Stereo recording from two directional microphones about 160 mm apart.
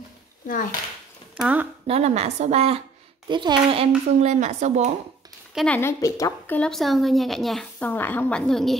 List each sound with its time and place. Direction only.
1.3 s speech: 10° right (ahead or behind)
1.9 s a woman's voice: 40° right (ahead or behind)
3.3 s speech: 30° right (ahead or behind); by 4.9 s 45° right (ahead or behind)
5.7 s a woman's voice: 15° left (ahead or behind)